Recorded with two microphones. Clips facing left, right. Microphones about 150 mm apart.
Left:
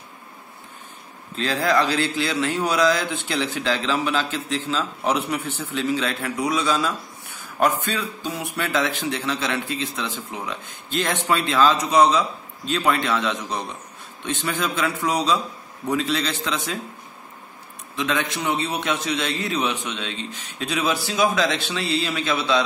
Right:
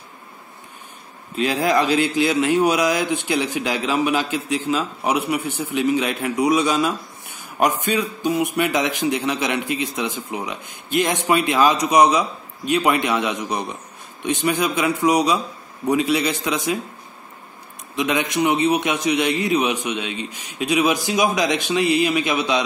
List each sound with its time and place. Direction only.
1.3 s a man's voice: 15° right (ahead or behind)
17.9 s a man's voice: 15° right (ahead or behind)